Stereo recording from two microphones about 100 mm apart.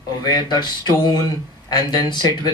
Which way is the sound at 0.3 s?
45° left (ahead or behind).